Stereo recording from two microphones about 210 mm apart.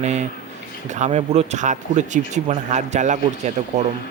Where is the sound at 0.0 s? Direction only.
35° right (ahead or behind).